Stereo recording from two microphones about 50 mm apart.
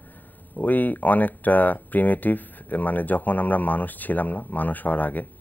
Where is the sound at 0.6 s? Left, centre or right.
Left.